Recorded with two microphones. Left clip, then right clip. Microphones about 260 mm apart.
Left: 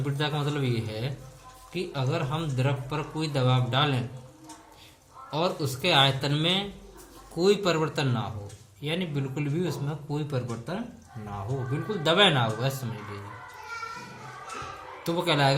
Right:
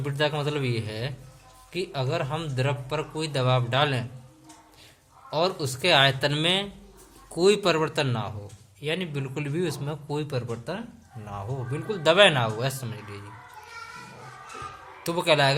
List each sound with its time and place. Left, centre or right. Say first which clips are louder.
0.0 s a man's voice: right 4 dB; right
5.3 s a man's voice: right 2 dB; right
11.9 s a man's voice: right 4 dB; right
15.0 s a man's voice: right 3 dB; right